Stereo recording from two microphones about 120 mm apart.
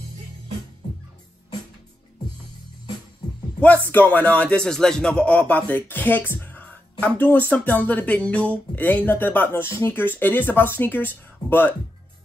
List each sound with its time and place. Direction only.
3.6 s a man's voice: 15° left (ahead or behind)